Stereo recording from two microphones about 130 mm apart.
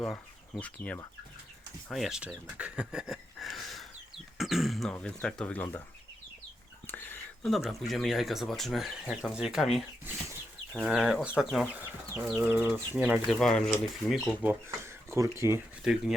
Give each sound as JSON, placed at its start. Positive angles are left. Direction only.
{"t": 0.8, "sound": "speech", "side_deg": 15}
{"t": 1.9, "sound": "speech", "side_deg": 0}
{"t": 6.8, "sound": "whispering", "side_deg": 15}
{"t": 7.4, "sound": "speech", "side_deg": 0}
{"t": 10.1, "sound": "speech", "side_deg": -15}
{"t": 10.8, "sound": "speech", "side_deg": -5}
{"t": 13.2, "sound": "speech", "side_deg": 0}
{"t": 14.8, "sound": "speech", "side_deg": -20}
{"t": 15.8, "sound": "speech", "side_deg": -5}